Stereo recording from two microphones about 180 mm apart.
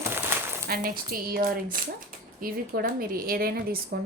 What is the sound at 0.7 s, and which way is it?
Speech, 50° right (ahead or behind).